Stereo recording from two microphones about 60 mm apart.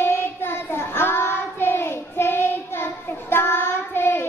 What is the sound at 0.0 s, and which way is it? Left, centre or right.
Child singing, left.